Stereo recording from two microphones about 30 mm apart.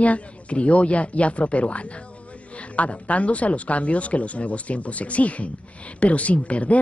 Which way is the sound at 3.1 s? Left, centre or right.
Left.